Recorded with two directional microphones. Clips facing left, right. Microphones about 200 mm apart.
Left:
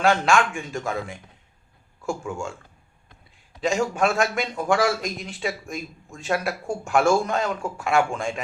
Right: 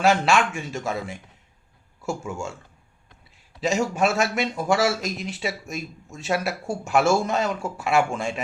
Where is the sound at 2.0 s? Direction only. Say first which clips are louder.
Left 1 dB; 5° right (ahead or behind).